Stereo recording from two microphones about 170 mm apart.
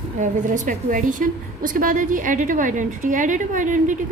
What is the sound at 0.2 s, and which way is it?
A woman's voice, 50° right (ahead or behind).